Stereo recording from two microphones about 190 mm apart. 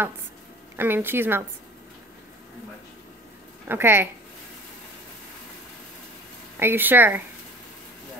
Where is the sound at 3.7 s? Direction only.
10° right (ahead or behind).